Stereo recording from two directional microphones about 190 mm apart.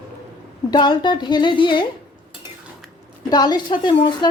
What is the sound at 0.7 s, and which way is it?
A woman's voice, 25° left (ahead or behind).